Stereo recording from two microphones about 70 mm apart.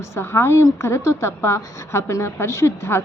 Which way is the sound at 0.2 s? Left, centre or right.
Left.